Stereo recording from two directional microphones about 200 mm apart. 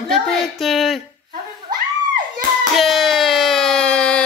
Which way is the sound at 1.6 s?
45° right (ahead or behind).